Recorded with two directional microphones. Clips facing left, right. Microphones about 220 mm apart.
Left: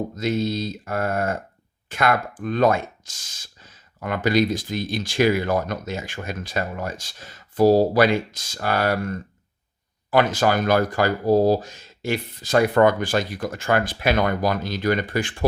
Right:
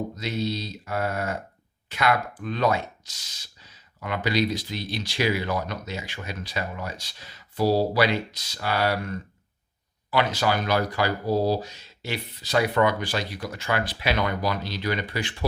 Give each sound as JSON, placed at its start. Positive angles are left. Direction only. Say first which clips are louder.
{"t": 0.2, "sound": "speech", "louder": "left 8 dB", "side_deg": 50}